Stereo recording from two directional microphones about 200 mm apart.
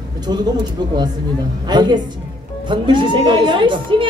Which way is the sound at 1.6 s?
20° right (ahead or behind).